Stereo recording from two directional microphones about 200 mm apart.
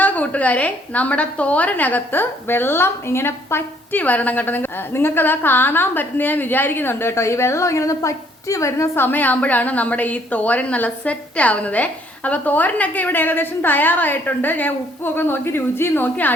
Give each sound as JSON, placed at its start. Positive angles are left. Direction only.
{"t": 0.0, "sound": "a woman's voice", "side_deg": 10}